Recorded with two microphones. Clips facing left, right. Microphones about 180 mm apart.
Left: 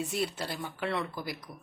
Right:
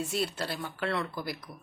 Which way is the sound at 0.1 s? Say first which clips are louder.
Right 1 dB; 15° left (ahead or behind).